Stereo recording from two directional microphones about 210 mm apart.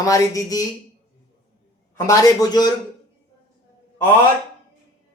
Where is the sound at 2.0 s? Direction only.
15° left (ahead or behind).